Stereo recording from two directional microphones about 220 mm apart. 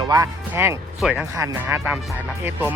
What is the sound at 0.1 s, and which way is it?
Speech, 15° right (ahead or behind).